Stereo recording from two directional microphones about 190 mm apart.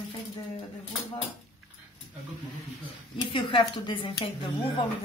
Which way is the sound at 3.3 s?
25° left (ahead or behind).